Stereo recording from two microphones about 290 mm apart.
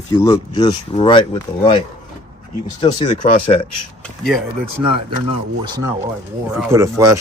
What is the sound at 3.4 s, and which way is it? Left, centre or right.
Speech, centre.